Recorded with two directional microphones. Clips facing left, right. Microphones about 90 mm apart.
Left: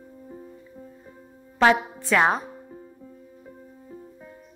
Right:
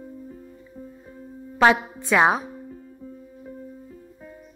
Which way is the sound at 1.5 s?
15° right (ahead or behind).